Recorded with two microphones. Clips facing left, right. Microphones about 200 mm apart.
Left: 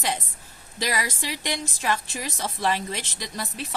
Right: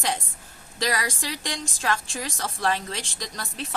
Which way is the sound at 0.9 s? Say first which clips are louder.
Even; 10° left (ahead or behind).